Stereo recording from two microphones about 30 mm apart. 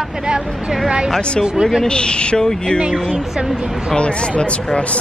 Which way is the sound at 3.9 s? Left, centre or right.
Left.